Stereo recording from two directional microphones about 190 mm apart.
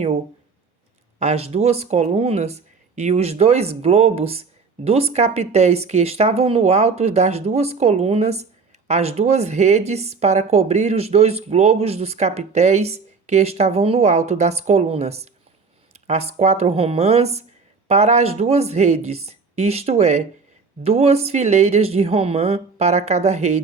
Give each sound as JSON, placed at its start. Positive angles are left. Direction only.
{"t": 1.2, "sound": "speech", "side_deg": -35}